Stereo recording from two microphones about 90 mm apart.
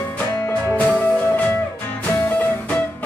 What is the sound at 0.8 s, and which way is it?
Music, 15° left (ahead or behind).